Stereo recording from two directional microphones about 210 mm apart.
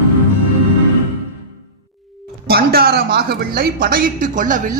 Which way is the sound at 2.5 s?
45° right (ahead or behind).